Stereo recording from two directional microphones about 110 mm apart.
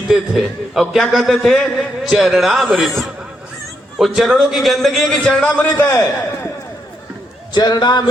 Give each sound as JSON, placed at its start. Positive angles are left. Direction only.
{"t": 0.1, "sound": "a man's voice", "side_deg": 0}
{"t": 5.7, "sound": "a man's voice", "side_deg": 20}
{"t": 7.5, "sound": "a man's voice", "side_deg": 40}